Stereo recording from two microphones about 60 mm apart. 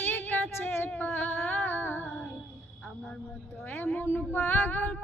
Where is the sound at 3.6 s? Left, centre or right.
Left.